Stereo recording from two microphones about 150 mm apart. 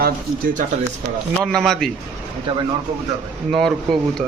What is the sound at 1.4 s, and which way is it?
Speech, 5° left (ahead or behind).